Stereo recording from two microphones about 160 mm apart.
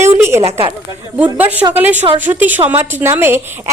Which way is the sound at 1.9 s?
35° right (ahead or behind).